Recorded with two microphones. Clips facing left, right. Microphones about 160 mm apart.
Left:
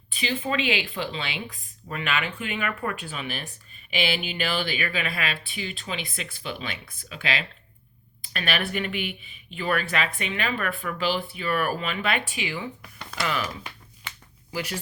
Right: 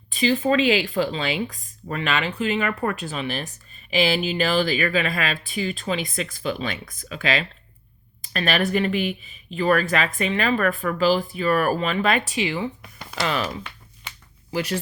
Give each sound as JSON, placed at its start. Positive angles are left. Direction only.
{"t": 0.1, "sound": "speech", "side_deg": -40}